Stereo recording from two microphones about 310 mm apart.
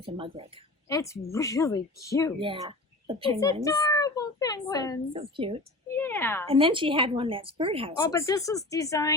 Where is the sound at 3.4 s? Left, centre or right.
Centre.